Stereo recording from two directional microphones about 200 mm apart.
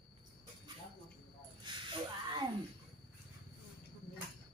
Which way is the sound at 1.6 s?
25° right (ahead or behind).